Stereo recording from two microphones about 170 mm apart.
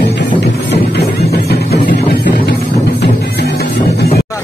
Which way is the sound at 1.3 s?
70° left (ahead or behind).